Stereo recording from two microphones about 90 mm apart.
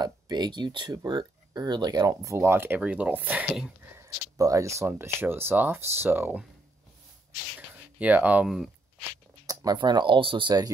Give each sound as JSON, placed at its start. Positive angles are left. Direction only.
{"t": 0.0, "sound": "speech", "side_deg": -50}
{"t": 2.2, "sound": "speech", "side_deg": -30}
{"t": 2.8, "sound": "speech", "side_deg": -15}
{"t": 3.8, "sound": "speech", "side_deg": -30}
{"t": 8.0, "sound": "speech", "side_deg": -15}
{"t": 9.5, "sound": "speech", "side_deg": -45}